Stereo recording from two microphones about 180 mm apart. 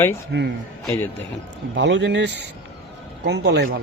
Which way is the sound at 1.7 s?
80° right.